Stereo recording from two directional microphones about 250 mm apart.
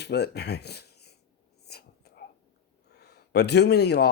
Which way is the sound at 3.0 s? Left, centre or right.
Left.